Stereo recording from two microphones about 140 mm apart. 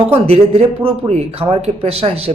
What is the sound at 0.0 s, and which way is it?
Speech, 45° right (ahead or behind).